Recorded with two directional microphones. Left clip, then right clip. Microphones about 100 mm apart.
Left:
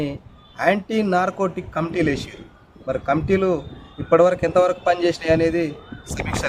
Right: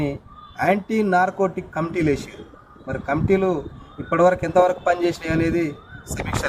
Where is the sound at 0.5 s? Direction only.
20° left (ahead or behind).